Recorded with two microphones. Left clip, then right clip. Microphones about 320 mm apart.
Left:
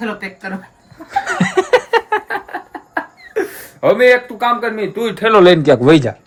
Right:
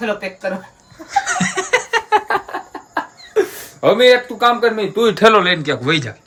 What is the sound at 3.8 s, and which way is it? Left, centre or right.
A man's voice, centre.